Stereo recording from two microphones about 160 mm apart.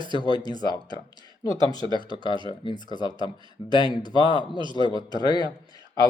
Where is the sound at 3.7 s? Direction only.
25° left (ahead or behind).